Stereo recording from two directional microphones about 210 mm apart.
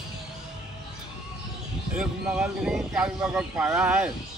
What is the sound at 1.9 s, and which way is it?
Speech, 5° right (ahead or behind).